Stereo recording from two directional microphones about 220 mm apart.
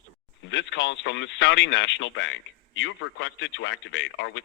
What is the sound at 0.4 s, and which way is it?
A man's voice, 55° left (ahead or behind).